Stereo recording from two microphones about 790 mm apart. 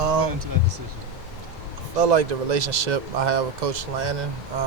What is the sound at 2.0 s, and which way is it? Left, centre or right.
Speech, right.